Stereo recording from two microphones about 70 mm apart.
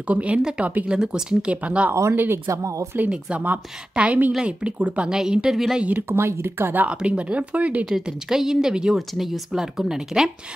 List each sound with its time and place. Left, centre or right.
0.0 s a woman's voice: centre
2.1 s speech: right
3.1 s a woman's voice: centre
6.0 s speech: right
6.9 s a woman's voice: centre
7.9 s a woman's voice: centre